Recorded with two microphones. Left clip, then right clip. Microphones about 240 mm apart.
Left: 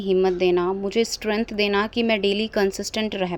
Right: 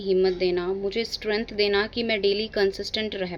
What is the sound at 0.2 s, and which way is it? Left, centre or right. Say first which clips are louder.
Speech: left 3 dB; left.